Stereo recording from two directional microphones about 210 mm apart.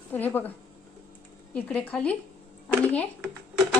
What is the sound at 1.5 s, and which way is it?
Speech, 5° left (ahead or behind).